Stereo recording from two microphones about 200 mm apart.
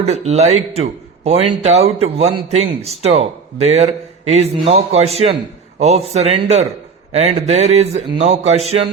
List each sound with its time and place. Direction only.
0.0 s a man's voice: 30° right (ahead or behind)